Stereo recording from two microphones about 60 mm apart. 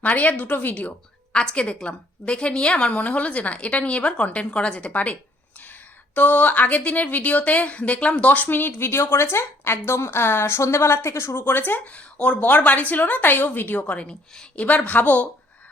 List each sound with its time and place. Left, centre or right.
0.0 s a woman's voice: left
1.3 s a woman's voice: centre
6.1 s a woman's voice: left
11.9 s a woman's voice: left